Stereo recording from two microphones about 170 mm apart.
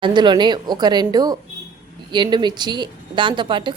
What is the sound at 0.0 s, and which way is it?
Speech, 25° right (ahead or behind).